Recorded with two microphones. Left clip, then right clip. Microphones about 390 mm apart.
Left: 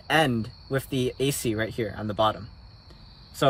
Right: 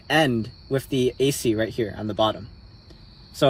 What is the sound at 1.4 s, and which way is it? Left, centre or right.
Speech, centre.